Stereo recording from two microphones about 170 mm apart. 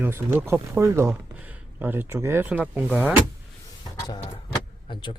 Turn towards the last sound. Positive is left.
turn(degrees=25)  # may be behind; listen again after turning